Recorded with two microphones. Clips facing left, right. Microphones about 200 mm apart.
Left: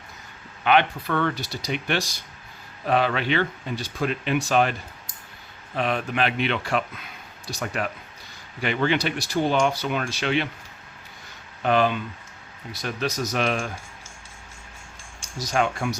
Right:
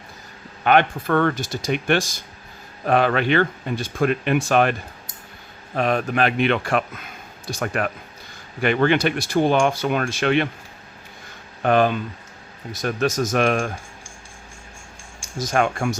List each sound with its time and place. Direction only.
0.6 s speech: 50° right (ahead or behind)
5.7 s speech: 45° right (ahead or behind)
11.6 s speech: 50° right (ahead or behind)
15.4 s speech: 50° right (ahead or behind)